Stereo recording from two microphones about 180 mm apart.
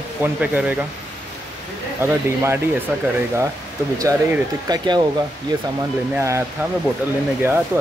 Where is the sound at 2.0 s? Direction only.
15° right (ahead or behind).